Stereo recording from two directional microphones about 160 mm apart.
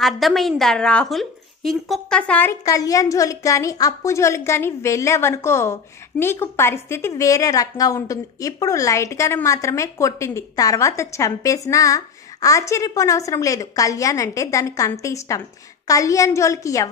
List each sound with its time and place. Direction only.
0.0 s a woman's voice: centre (ahead or behind)
2.6 s a woman's voice: 20° left (ahead or behind)